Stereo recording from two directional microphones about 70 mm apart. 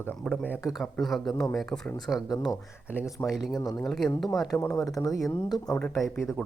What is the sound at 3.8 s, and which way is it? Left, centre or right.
Speech, centre.